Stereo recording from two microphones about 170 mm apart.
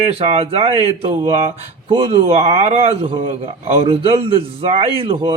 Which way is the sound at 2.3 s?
35° right (ahead or behind).